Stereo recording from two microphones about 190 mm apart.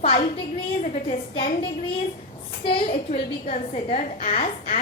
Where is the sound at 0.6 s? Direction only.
35° left (ahead or behind).